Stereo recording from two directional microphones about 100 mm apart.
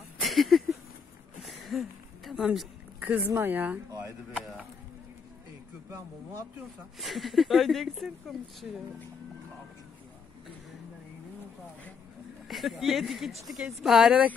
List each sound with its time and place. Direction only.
0.2 s a sound: centre (ahead or behind)
3.1 s speech: 20° right (ahead or behind)
5.9 s speech: 35° right (ahead or behind)
7.0 s speech: centre (ahead or behind)
12.4 s speech: centre (ahead or behind)